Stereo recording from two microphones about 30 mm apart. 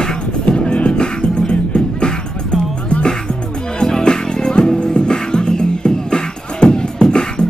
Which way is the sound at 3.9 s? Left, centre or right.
Left.